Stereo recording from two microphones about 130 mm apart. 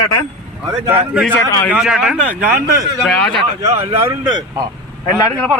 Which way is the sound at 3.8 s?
20° right (ahead or behind).